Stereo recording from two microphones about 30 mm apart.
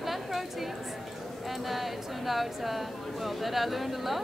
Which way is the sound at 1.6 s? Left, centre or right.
Centre.